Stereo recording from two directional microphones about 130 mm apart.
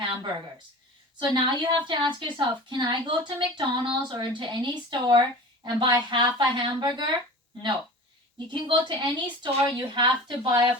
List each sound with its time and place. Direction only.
0.0 s a sound: 40° right (ahead or behind)
1.3 s a woman's voice: 35° right (ahead or behind)
8.5 s a woman's voice: 35° right (ahead or behind)